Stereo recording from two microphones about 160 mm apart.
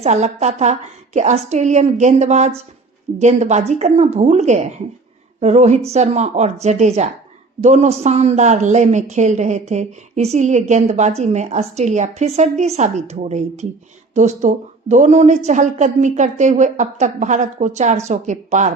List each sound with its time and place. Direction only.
0.0 s a woman's voice: 45° right (ahead or behind)